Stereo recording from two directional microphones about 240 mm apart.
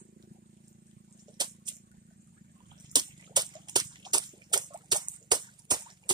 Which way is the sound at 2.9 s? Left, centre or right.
Centre.